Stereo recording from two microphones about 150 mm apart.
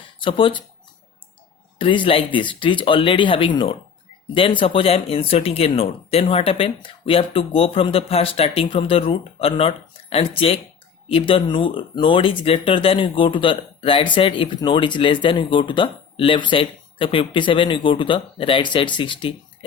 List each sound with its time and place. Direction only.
0.2 s speech: 35° left (ahead or behind)
1.8 s speech: 35° left (ahead or behind)